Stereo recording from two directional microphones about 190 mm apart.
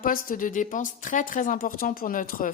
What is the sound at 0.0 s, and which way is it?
Speech, 45° left (ahead or behind).